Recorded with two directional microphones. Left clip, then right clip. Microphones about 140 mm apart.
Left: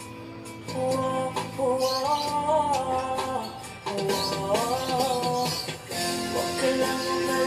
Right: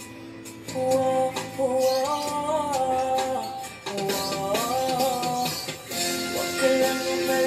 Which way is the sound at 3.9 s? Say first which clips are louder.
Even; 25° right (ahead or behind).